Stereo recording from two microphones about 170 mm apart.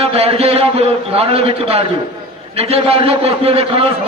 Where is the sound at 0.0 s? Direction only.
35° right (ahead or behind).